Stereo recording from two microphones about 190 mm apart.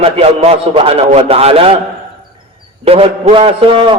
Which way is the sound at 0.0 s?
30° right (ahead or behind).